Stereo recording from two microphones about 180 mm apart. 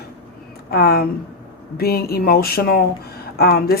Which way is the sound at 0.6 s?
60° left (ahead or behind).